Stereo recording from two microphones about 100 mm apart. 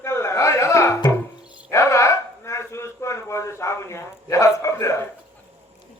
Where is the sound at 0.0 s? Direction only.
30° left (ahead or behind).